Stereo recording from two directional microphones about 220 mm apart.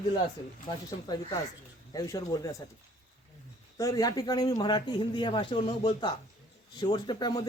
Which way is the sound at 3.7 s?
15° left (ahead or behind).